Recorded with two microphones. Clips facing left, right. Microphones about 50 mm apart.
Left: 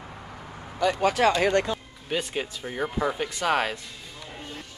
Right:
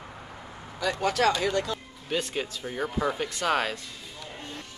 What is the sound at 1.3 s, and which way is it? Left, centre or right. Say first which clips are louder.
Speech: left 4 dB; left.